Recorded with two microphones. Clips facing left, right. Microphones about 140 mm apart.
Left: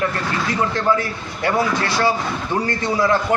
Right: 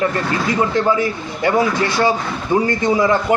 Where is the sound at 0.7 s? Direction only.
15° right (ahead or behind).